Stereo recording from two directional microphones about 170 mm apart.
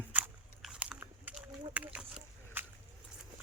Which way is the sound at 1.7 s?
10° right (ahead or behind).